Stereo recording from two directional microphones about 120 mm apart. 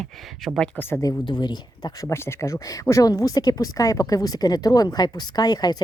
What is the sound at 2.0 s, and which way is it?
Speech, 20° left (ahead or behind).